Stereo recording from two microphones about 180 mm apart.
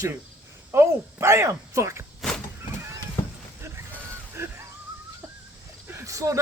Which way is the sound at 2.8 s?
15° right (ahead or behind).